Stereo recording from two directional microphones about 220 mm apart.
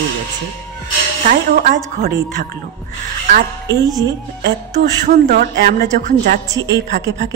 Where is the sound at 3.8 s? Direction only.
15° right (ahead or behind).